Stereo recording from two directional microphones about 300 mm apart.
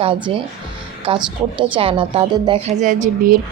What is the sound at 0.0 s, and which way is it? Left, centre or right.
A woman's voice, centre.